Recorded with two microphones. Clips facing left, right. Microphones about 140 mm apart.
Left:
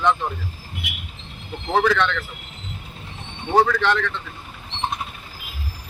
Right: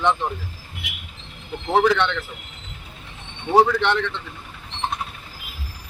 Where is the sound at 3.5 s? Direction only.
20° right (ahead or behind).